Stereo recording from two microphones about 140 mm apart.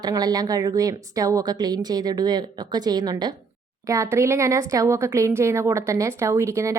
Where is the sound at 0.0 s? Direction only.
30° right (ahead or behind).